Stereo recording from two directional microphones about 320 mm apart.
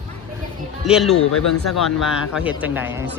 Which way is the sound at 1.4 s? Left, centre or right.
Left.